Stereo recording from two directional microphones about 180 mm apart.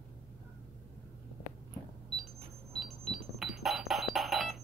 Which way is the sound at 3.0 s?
Centre (ahead or behind).